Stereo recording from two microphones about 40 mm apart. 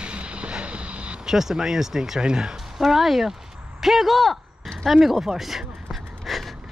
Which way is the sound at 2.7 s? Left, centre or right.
Centre.